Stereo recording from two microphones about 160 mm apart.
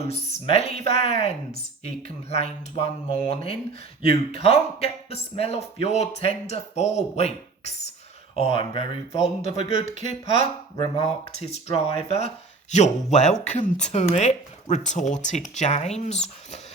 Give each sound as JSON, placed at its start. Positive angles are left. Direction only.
{"t": 0.1, "sound": "speech", "side_deg": 40}